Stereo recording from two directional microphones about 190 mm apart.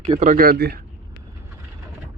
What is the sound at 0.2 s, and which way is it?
Speech, 45° right (ahead or behind).